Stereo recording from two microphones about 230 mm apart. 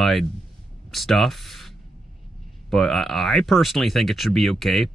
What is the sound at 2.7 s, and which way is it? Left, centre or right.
Speech, centre.